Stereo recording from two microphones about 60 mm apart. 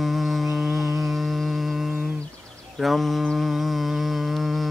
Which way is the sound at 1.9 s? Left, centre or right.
Right.